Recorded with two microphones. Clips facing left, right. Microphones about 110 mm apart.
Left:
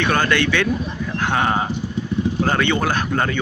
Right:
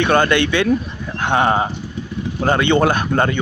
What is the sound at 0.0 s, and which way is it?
Speech, 20° right (ahead or behind).